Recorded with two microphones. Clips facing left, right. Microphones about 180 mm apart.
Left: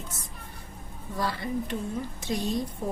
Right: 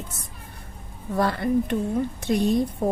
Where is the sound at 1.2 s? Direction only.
55° right (ahead or behind).